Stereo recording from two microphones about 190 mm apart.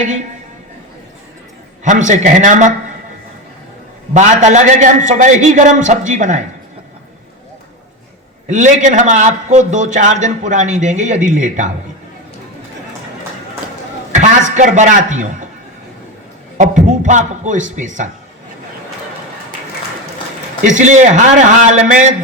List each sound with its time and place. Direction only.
1.8 s a man's voice: 40° right (ahead or behind)
4.1 s a man's voice: 40° right (ahead or behind)
8.4 s a man's voice: 40° right (ahead or behind)
14.1 s a man's voice: 40° right (ahead or behind)
16.6 s a man's voice: 40° right (ahead or behind)
20.7 s a man's voice: 40° right (ahead or behind)